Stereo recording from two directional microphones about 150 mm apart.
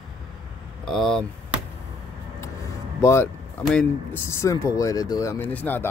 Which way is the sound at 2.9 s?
20° left (ahead or behind).